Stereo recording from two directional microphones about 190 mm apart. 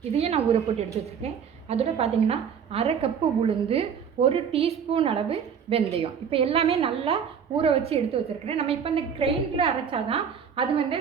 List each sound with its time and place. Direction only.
0.2 s a woman's voice: 35° right (ahead or behind)